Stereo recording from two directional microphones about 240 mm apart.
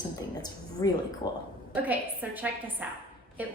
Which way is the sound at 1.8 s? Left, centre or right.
Centre.